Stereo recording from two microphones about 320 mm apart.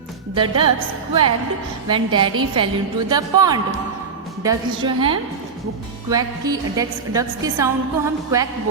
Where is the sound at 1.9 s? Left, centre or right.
Centre.